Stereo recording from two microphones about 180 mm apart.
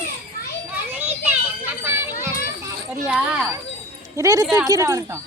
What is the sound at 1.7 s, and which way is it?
Run, 10° right (ahead or behind).